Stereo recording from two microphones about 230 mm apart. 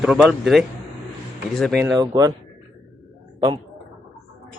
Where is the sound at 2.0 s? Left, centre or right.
Centre.